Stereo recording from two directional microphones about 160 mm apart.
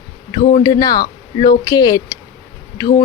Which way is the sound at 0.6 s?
25° left (ahead or behind).